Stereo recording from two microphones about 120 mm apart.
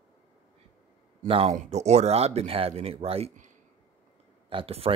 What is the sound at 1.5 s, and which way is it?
Speech, 65° right (ahead or behind).